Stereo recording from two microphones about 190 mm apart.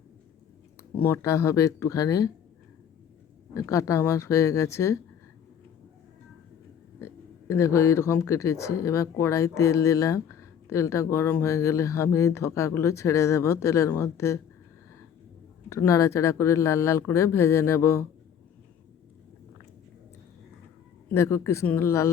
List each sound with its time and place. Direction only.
1.0 s speech: 15° left (ahead or behind)
3.5 s speech: 15° left (ahead or behind)
7.0 s speech: 15° left (ahead or behind)
15.7 s speech: 15° left (ahead or behind)
21.1 s speech: 15° left (ahead or behind)